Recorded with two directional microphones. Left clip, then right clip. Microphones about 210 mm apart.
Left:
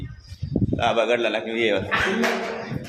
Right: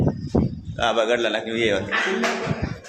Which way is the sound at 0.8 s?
10° right (ahead or behind).